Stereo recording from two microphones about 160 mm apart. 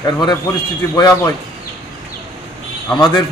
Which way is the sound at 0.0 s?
25° left (ahead or behind).